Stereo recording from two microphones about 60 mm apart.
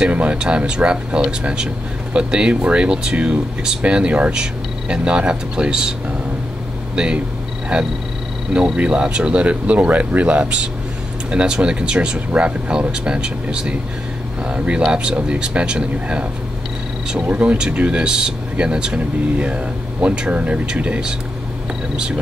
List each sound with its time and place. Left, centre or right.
0.0 s speech: right
7.7 s speech: centre
17.3 s speech: right